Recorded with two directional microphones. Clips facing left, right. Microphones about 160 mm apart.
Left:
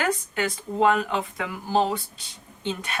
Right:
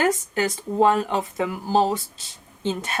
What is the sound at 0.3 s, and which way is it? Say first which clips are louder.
Speech: right 4 dB; 40° right (ahead or behind).